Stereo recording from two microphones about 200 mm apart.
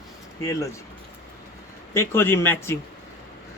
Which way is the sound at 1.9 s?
10° left (ahead or behind).